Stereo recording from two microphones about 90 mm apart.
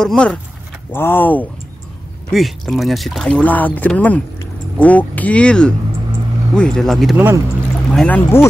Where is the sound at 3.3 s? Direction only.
15° left (ahead or behind).